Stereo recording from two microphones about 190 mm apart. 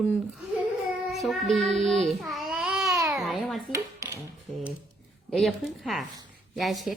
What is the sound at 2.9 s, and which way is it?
Babbling, 15° right (ahead or behind).